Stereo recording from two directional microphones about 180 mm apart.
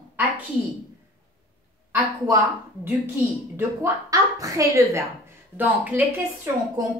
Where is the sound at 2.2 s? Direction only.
15° right (ahead or behind).